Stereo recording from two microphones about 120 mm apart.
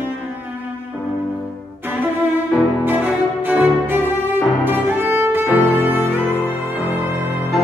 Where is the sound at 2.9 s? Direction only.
15° right (ahead or behind).